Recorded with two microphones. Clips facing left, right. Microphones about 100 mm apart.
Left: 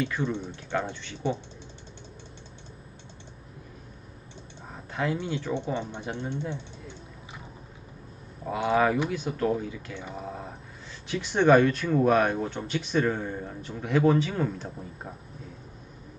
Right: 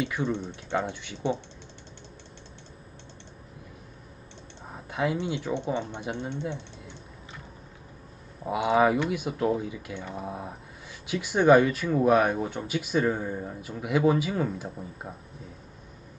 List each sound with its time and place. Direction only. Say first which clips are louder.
0.0 s speech: even; 15° right (ahead or behind)
4.9 s speech: right 1 dB; 15° right (ahead or behind)
8.5 s speech: right 2 dB; 15° right (ahead or behind)